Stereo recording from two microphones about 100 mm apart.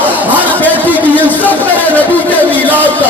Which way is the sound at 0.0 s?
15° right (ahead or behind).